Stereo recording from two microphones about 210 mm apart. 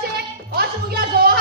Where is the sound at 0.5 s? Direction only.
50° right (ahead or behind).